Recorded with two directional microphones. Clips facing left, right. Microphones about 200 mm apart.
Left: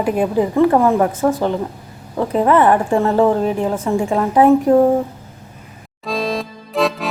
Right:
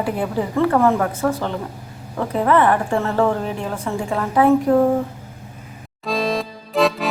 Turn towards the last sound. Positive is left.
turn(degrees=0)  # may be behind; listen again after turning